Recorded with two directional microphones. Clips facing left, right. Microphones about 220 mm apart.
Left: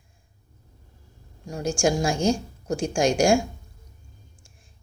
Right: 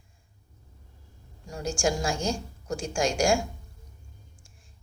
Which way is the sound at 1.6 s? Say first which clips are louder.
Left 5 dB; 15° left (ahead or behind).